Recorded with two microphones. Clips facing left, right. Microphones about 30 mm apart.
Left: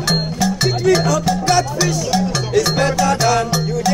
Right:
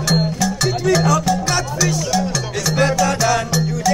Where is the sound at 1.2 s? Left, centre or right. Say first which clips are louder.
Even; centre.